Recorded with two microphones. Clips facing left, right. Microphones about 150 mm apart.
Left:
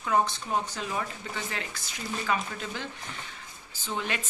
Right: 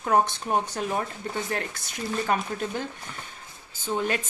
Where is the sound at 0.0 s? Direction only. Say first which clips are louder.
Right 3 dB; 50° right (ahead or behind).